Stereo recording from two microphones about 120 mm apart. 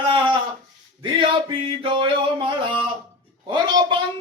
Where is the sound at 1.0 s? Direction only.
45° right (ahead or behind).